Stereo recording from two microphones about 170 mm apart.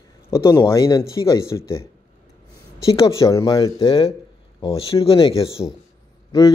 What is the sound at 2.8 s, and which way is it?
Speech, 20° left (ahead or behind).